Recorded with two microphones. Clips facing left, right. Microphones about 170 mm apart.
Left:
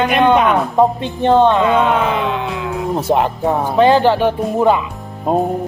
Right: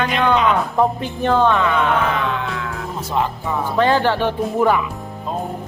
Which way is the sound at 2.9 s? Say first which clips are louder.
Left 6 dB; 65° left (ahead or behind).